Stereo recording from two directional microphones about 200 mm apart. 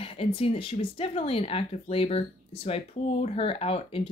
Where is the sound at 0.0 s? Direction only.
25° left (ahead or behind).